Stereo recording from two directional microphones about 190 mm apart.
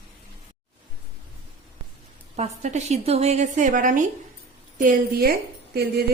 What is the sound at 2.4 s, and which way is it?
A woman's voice, 35° right (ahead or behind).